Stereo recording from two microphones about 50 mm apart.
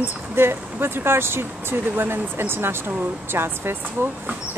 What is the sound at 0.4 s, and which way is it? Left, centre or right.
Speech, right.